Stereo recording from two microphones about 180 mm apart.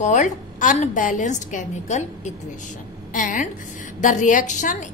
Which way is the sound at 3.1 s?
45° left (ahead or behind).